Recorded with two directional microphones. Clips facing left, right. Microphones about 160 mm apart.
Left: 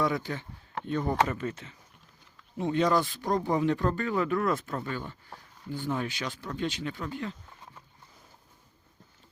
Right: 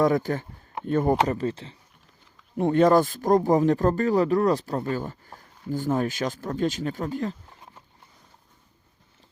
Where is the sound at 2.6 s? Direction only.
50° right (ahead or behind).